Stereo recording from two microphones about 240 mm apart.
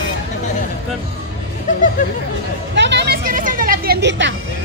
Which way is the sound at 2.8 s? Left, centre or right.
Right.